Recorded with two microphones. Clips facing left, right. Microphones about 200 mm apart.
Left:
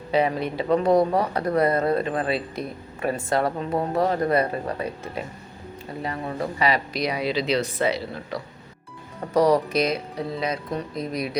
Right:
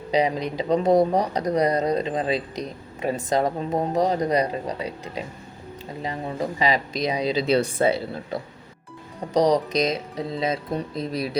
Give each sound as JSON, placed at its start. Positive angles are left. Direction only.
{"t": 0.1, "sound": "speech", "side_deg": -15}
{"t": 6.0, "sound": "speech", "side_deg": -20}
{"t": 9.3, "sound": "speech", "side_deg": -20}